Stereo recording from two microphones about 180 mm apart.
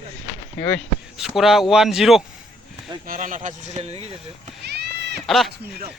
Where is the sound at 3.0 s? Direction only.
50° right (ahead or behind).